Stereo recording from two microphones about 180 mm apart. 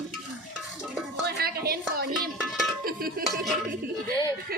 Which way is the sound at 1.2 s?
65° right (ahead or behind).